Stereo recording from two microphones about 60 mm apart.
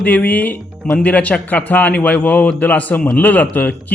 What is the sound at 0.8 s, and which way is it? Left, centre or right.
Speech, centre.